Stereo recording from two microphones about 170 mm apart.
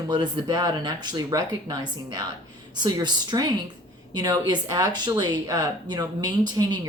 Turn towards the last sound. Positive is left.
turn(degrees=-20)  # may be behind; listen again after turning